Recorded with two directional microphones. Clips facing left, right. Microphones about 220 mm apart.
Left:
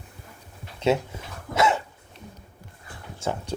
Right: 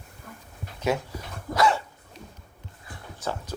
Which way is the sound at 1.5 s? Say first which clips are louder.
Even; 20° left (ahead or behind).